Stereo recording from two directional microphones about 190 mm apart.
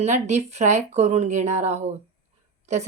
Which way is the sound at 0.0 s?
35° right (ahead or behind).